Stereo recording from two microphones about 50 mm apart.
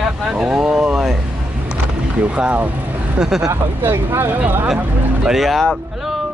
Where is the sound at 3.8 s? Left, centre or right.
Right.